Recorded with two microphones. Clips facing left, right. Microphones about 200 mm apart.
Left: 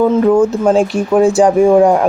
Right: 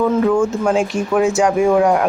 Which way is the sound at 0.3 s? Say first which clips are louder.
Left 5 dB; 35° left (ahead or behind).